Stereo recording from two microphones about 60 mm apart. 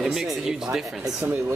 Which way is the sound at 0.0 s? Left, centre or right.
Centre.